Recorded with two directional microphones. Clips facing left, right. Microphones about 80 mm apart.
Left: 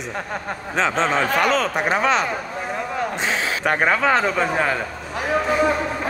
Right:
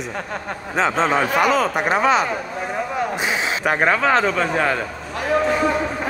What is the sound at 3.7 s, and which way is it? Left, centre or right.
Speech, centre.